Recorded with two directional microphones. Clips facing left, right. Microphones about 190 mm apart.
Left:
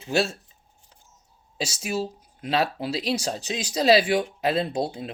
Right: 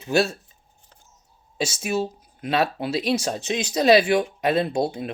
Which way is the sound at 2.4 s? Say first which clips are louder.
Right 2 dB; 30° left (ahead or behind).